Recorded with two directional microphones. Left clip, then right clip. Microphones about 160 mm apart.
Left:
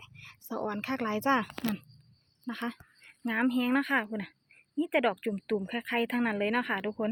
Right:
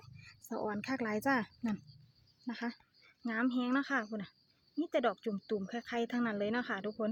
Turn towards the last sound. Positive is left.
turn(degrees=25)  # may be behind; listen again after turning